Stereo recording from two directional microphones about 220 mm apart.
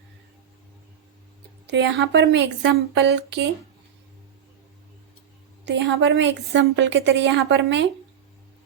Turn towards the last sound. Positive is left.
turn(degrees=-55)  # may be behind; listen again after turning